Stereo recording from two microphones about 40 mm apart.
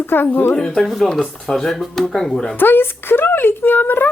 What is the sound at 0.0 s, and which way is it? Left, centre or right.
Speech, left.